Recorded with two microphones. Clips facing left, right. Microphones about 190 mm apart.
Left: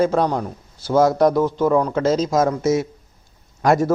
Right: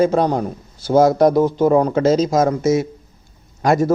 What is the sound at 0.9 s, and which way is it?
A man's voice, 20° right (ahead or behind).